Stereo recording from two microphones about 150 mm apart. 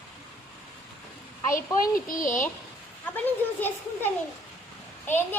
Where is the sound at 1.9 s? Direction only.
65° left (ahead or behind).